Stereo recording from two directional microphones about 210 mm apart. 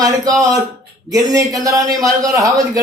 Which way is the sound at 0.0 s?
15° right (ahead or behind).